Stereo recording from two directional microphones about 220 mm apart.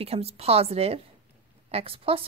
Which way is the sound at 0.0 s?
30° right (ahead or behind).